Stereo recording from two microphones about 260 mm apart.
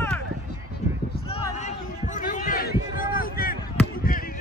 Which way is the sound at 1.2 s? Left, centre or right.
Left.